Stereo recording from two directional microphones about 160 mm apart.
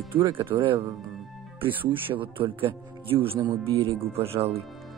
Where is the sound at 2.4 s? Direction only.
35° right (ahead or behind).